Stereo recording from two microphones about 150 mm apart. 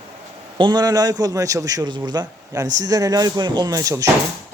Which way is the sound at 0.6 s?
30° right (ahead or behind).